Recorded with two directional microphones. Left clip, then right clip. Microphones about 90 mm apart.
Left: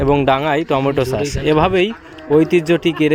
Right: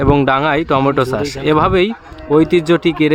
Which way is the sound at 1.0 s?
25° right (ahead or behind).